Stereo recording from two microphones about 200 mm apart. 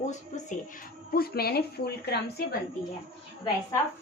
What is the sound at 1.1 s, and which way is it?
A woman's voice, 50° left (ahead or behind).